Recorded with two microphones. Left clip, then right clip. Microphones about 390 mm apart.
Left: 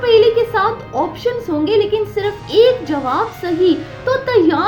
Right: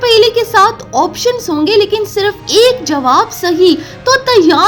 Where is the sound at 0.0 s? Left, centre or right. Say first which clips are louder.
Right 3 dB; right.